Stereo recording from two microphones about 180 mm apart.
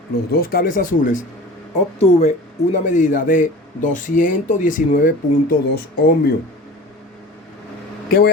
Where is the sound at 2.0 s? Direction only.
35° left (ahead or behind); by 6.3 s 60° left (ahead or behind).